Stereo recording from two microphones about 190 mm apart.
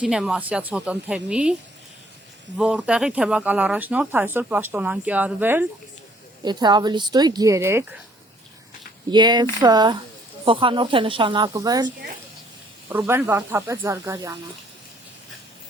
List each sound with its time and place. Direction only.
0.0 s a woman's voice: 5° right (ahead or behind)
2.6 s speech: 5° right (ahead or behind)
6.4 s speech: 20° right (ahead or behind)
9.0 s speech: 25° right (ahead or behind)
12.9 s speech: 10° right (ahead or behind)